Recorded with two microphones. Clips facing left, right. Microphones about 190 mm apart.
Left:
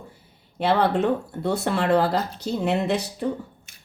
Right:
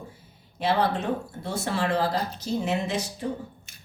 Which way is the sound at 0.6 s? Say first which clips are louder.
Left 4 dB; 60° left (ahead or behind).